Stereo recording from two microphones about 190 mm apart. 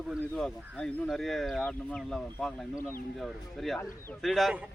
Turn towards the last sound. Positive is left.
turn(degrees=0)  # may be behind; listen again after turning